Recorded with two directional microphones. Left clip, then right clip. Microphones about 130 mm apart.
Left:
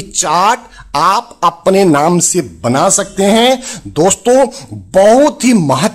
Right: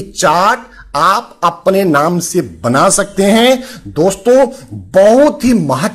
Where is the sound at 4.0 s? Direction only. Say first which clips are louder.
Even; 15° left (ahead or behind).